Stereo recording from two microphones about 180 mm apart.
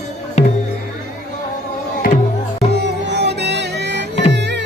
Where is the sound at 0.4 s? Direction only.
35° left (ahead or behind).